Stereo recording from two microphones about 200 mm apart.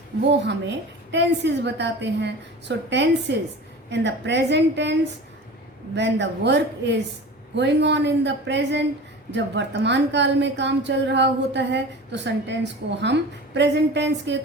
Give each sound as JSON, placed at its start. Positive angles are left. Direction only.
{"t": 0.3, "sound": "a woman's voice", "side_deg": -60}